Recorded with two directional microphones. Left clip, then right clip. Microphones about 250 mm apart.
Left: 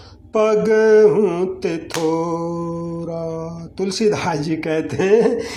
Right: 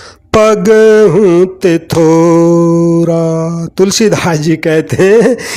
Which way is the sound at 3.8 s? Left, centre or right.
Right.